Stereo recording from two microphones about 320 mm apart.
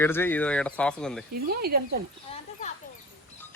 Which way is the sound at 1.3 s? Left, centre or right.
Right.